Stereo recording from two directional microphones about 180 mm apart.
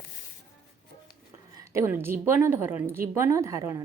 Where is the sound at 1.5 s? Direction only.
15° right (ahead or behind).